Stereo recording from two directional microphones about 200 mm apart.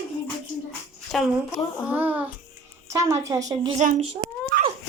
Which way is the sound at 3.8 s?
40° right (ahead or behind).